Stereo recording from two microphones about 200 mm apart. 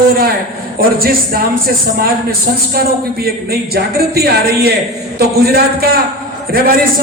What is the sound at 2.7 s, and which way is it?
Speech, 50° right (ahead or behind).